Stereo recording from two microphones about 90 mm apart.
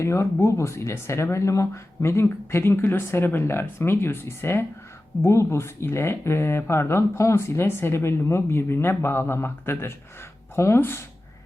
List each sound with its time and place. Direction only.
0.0 s speech: 30° left (ahead or behind)